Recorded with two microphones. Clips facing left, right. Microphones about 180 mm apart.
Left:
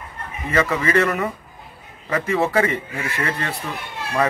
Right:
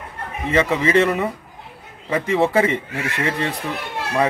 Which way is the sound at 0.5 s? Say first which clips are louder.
Right 2 dB; 20° right (ahead or behind).